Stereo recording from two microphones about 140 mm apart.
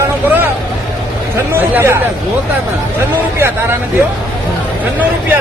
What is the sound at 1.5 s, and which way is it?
Speech, 15° right (ahead or behind).